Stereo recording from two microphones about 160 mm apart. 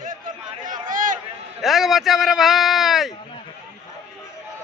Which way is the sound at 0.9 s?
55° right (ahead or behind).